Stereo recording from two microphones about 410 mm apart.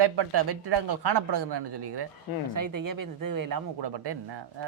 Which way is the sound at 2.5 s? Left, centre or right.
Right.